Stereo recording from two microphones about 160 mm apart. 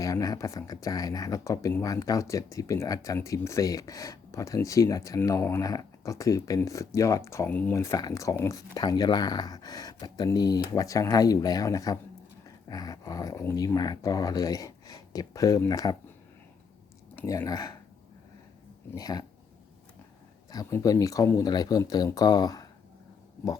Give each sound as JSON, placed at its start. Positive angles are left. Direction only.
{"t": 0.0, "sound": "speech", "side_deg": 20}
{"t": 17.2, "sound": "speech", "side_deg": 20}
{"t": 18.9, "sound": "speech", "side_deg": 25}
{"t": 20.5, "sound": "speech", "side_deg": 20}